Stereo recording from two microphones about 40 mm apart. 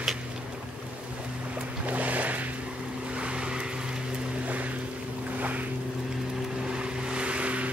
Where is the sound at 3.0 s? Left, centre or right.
Right.